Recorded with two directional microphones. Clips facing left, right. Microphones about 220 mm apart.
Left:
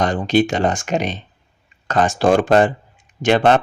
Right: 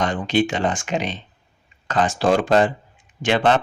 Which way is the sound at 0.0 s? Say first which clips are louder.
Left 4 dB; 40° left (ahead or behind).